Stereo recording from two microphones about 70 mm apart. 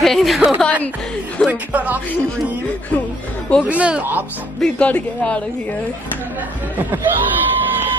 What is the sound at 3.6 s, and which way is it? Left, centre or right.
Speech, centre.